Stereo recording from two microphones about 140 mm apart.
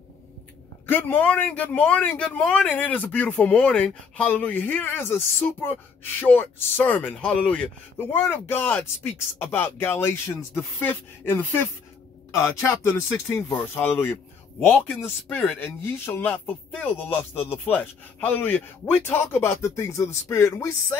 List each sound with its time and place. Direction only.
0.8 s speech: 15° left (ahead or behind)